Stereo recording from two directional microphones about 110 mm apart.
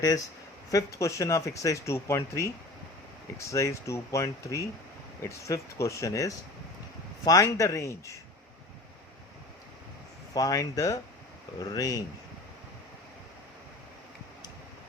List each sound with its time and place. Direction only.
0.7 s speech: 30° left (ahead or behind)
10.3 s speech: 35° left (ahead or behind)